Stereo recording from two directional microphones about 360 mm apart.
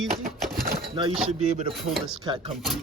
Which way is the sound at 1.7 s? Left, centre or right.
Centre.